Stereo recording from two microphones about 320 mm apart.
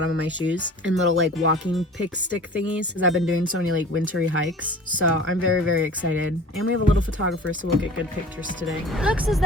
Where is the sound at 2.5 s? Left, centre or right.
Centre.